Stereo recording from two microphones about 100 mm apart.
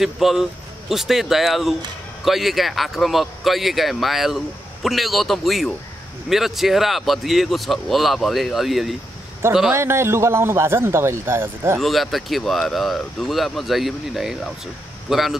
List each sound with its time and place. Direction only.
0.0 s speech: centre (ahead or behind)
9.7 s a man's voice: 25° right (ahead or behind)
11.8 s speech: centre (ahead or behind)